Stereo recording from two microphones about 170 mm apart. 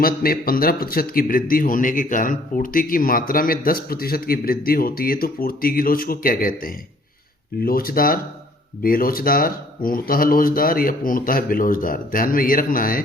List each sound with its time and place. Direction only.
0.0 s a man's voice: 60° left (ahead or behind)